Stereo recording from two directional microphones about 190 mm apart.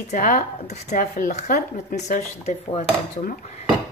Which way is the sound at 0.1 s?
40° left (ahead or behind).